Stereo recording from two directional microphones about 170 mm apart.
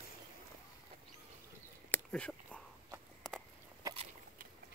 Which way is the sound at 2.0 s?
5° left (ahead or behind).